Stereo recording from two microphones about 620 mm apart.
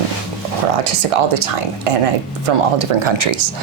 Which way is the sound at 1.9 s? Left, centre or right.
Right.